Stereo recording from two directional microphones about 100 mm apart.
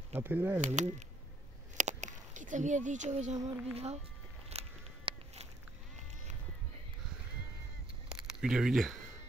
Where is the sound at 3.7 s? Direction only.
90° right.